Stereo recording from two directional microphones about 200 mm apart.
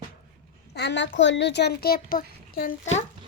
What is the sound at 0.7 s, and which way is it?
A child's voice, 55° left (ahead or behind).